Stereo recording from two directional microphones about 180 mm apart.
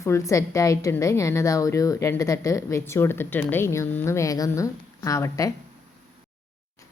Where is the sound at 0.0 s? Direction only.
15° left (ahead or behind).